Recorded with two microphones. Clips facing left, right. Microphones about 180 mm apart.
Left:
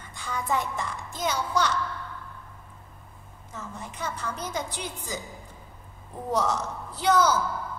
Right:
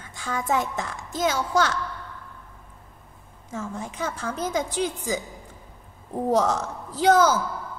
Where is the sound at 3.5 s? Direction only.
90° right.